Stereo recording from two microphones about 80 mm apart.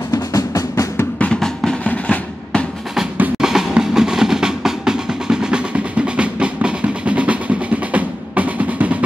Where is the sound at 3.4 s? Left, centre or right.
Centre.